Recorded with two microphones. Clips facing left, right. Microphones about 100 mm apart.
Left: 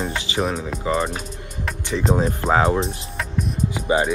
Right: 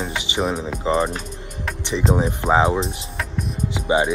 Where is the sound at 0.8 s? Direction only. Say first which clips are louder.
Right 2 dB; 25° right (ahead or behind).